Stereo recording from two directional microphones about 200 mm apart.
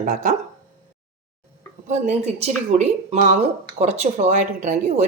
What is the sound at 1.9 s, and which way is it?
Speech, 35° right (ahead or behind).